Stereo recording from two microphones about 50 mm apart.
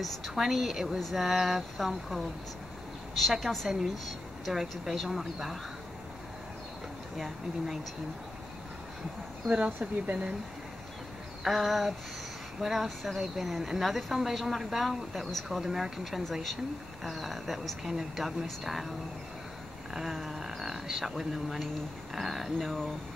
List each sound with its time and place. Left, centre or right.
0.3 s a woman's voice: centre
7.2 s speech: centre
9.5 s speech: right
11.4 s a woman's voice: centre
22.7 s speech: centre